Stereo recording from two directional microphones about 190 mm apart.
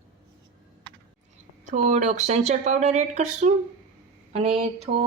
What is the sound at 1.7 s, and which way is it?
Speech, 40° right (ahead or behind).